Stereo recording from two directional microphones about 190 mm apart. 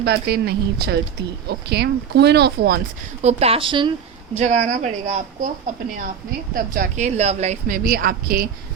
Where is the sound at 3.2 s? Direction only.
30° right (ahead or behind).